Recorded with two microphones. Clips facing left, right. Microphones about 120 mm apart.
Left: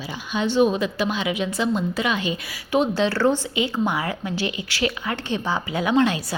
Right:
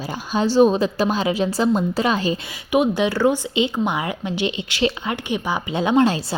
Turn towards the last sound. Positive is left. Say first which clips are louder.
# right 3 dB
turn(degrees=-30)  # may be behind; listen again after turning